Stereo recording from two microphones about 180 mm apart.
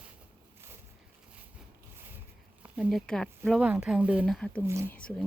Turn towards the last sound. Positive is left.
turn(degrees=5)  # may be behind; listen again after turning